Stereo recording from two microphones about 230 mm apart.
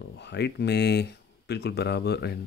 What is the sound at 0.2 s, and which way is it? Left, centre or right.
Speech, left.